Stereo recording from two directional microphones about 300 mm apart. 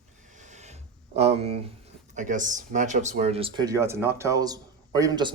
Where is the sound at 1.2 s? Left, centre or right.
Right.